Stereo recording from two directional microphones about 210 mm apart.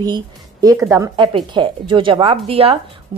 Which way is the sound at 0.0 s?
20° right (ahead or behind).